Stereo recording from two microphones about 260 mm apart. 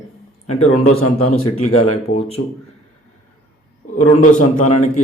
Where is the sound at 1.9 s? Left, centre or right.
Left.